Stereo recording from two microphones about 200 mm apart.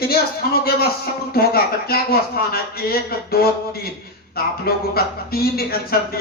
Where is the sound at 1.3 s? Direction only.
50° left (ahead or behind).